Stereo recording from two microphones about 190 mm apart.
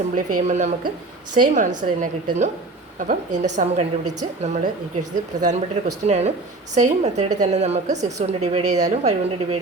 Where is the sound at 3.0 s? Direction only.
40° right (ahead or behind).